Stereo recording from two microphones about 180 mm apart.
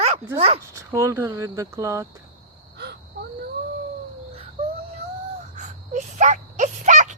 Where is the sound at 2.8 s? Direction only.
65° right (ahead or behind).